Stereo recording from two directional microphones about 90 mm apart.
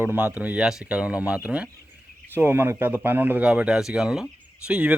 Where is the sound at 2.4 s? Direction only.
25° right (ahead or behind).